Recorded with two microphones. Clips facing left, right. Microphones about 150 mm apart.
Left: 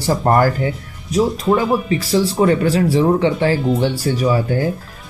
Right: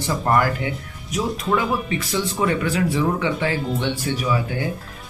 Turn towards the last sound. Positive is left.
turn(degrees=40)  # may be behind; listen again after turning